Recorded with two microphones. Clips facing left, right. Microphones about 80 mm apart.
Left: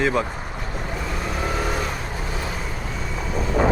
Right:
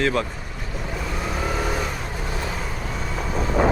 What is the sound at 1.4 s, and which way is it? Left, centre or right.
Vehicle, centre.